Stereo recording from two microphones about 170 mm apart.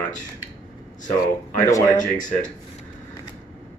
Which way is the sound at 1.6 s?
15° left (ahead or behind).